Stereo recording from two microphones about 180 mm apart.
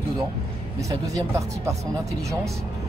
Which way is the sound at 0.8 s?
20° right (ahead or behind).